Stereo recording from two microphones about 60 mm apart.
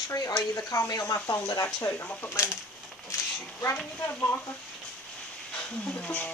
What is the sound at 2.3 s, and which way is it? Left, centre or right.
Speech, left.